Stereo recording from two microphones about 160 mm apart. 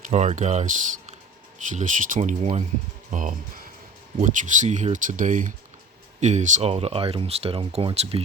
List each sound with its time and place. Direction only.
0.1 s speech: 45° right (ahead or behind)
3.1 s speech: 55° right (ahead or behind)
4.2 s speech: 50° right (ahead or behind)